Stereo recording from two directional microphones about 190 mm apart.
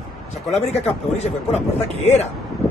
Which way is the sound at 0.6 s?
35° left (ahead or behind).